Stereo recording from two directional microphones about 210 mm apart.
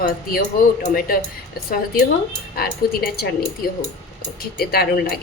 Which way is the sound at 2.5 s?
45° left (ahead or behind).